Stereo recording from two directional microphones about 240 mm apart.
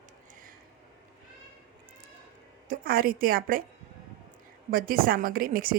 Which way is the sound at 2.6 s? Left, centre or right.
Right.